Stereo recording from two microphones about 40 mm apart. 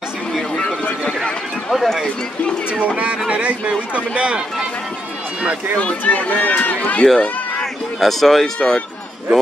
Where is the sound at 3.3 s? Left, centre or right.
Right.